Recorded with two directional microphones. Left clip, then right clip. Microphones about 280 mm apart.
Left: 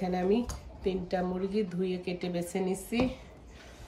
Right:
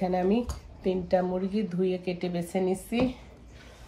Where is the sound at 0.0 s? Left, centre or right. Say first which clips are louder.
Right 3 dB; centre.